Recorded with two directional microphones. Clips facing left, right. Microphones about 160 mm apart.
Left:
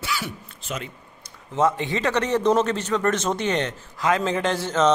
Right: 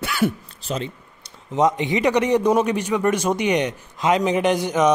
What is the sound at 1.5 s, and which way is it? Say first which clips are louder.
A man's voice: right 3 dB; 20° right (ahead or behind).